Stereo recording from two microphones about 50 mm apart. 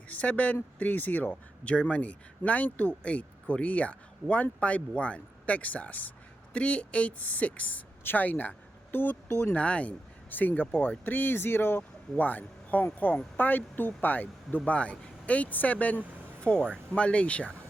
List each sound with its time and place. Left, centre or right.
0.1 s speech: left
9.6 s speech: left
10.2 s speech: left
12.1 s speech: left
14.6 s speech: left